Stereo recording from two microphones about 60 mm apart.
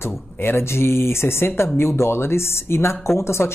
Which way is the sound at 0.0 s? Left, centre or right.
Left.